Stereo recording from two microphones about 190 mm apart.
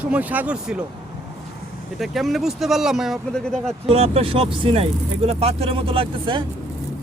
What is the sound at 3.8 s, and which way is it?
Speech, 30° right (ahead or behind).